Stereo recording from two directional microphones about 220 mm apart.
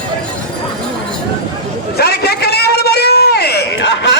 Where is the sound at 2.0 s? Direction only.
45° left (ahead or behind).